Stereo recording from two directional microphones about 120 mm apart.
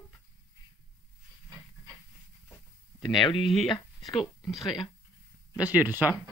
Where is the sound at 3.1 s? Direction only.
45° left (ahead or behind).